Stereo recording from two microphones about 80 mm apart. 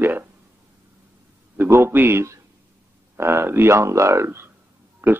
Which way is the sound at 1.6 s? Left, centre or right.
Right.